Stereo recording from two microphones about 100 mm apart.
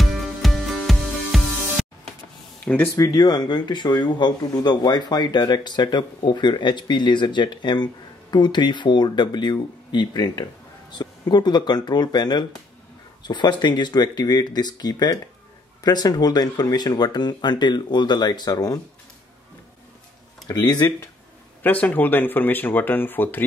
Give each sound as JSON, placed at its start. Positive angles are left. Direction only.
{"t": 0.0, "sound": "music", "side_deg": 0}
{"t": 2.6, "sound": "speech", "side_deg": 15}
{"t": 3.0, "sound": "speech", "side_deg": 40}
{"t": 20.4, "sound": "speech", "side_deg": 40}
{"t": 21.6, "sound": "speech", "side_deg": 15}